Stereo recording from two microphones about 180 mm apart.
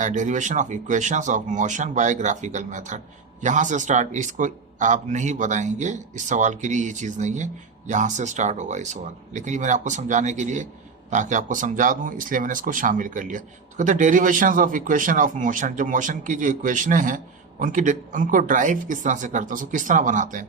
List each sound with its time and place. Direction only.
0.0 s a man's voice: 40° right (ahead or behind)